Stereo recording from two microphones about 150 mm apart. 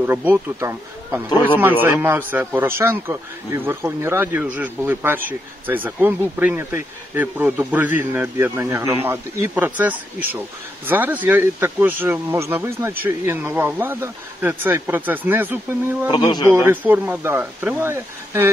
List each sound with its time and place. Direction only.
0.0 s a man's voice: 10° right (ahead or behind)